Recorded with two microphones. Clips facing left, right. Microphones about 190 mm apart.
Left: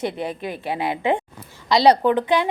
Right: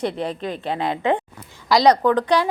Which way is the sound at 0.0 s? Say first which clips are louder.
Right 1 dB; 5° left (ahead or behind).